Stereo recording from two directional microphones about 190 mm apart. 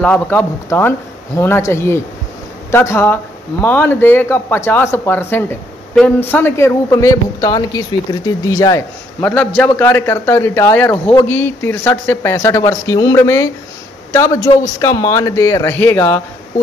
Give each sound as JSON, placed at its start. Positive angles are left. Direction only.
{"t": 0.0, "sound": "speech", "side_deg": 5}
{"t": 9.2, "sound": "speech", "side_deg": 5}